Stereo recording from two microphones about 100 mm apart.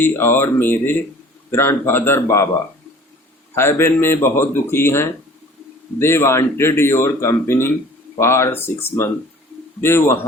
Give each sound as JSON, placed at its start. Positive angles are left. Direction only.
{"t": 0.0, "sound": "speech", "side_deg": 20}
{"t": 3.5, "sound": "speech", "side_deg": 25}